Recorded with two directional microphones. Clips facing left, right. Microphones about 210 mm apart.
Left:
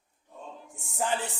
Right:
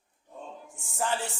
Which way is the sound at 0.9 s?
20° left (ahead or behind).